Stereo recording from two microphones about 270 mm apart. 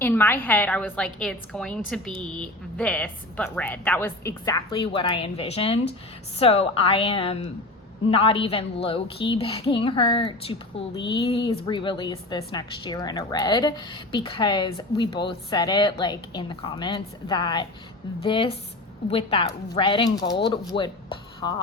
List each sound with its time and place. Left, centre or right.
0.0 s a woman's voice: centre